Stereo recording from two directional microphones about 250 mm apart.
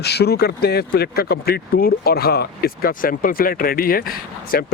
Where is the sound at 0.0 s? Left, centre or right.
Left.